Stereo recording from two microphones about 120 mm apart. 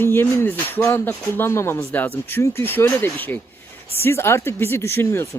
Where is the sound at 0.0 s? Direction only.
20° left (ahead or behind).